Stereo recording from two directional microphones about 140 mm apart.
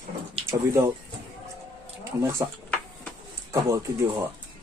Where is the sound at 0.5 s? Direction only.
20° right (ahead or behind).